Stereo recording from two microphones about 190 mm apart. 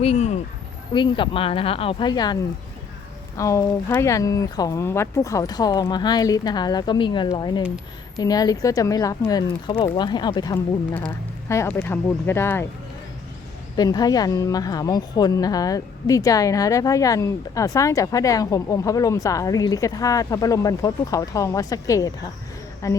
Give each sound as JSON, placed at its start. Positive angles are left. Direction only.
{"t": 0.0, "sound": "a woman's voice", "side_deg": 35}
{"t": 13.7, "sound": "a woman's voice", "side_deg": 20}